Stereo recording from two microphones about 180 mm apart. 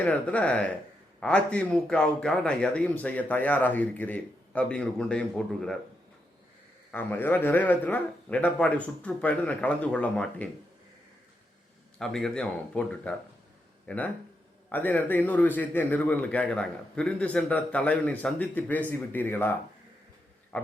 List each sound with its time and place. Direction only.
0.0 s a man's voice: 10° left (ahead or behind)
6.9 s a man's voice: 10° left (ahead or behind)
11.9 s a man's voice: centre (ahead or behind)
20.5 s insect: 5° left (ahead or behind)